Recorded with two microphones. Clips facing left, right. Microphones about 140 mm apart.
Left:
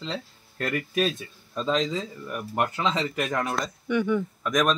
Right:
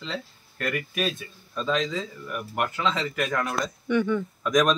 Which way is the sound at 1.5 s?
25° left (ahead or behind).